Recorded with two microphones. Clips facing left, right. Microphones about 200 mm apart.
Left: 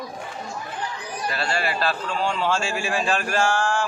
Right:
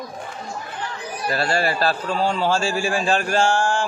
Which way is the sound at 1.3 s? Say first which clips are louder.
Right 5 dB; 40° right (ahead or behind).